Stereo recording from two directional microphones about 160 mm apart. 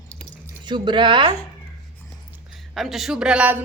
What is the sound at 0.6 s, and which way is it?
Speech, 30° right (ahead or behind).